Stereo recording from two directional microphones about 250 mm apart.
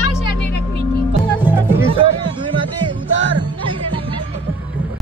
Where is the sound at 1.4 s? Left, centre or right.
Centre.